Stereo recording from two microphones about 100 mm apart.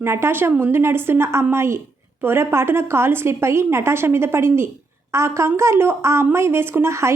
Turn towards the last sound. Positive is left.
turn(degrees=-30)  # may be behind; listen again after turning